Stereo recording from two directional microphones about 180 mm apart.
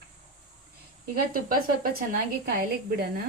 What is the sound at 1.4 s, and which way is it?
Speech, 55° right (ahead or behind).